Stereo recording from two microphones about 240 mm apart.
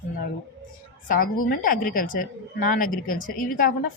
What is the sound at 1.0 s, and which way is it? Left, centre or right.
A woman's voice, left.